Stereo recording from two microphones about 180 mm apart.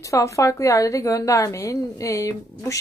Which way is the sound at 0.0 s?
15° left (ahead or behind).